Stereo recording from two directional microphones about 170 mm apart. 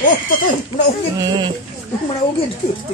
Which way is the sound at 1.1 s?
25° right (ahead or behind).